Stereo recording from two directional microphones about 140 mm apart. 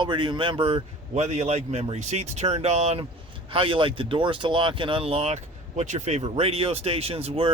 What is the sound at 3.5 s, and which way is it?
Speech, 40° right (ahead or behind).